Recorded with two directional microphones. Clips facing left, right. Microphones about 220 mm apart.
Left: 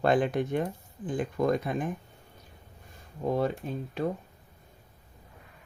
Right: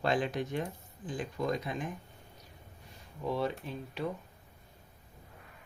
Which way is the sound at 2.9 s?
50° left (ahead or behind).